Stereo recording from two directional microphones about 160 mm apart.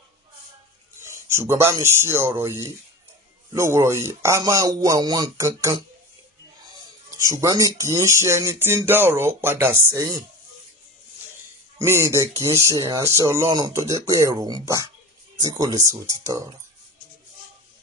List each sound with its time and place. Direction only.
1.3 s speech: 15° right (ahead or behind)
7.2 s speech: 20° right (ahead or behind)
11.8 s speech: 15° right (ahead or behind)